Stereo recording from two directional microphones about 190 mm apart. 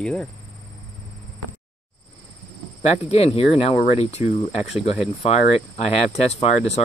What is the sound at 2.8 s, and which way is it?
Speech, 35° left (ahead or behind).